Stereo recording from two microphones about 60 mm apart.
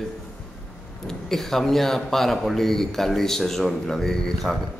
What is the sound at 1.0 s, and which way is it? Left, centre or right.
Speech, centre.